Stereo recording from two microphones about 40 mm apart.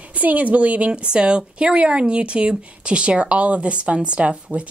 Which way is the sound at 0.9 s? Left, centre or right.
Right.